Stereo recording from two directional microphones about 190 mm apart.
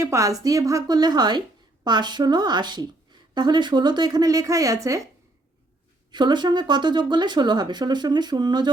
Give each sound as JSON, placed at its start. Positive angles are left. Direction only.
{"t": 0.0, "sound": "speech", "side_deg": -15}
{"t": 6.1, "sound": "speech", "side_deg": -25}